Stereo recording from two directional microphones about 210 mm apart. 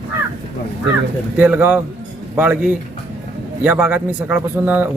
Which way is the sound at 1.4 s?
5° right (ahead or behind).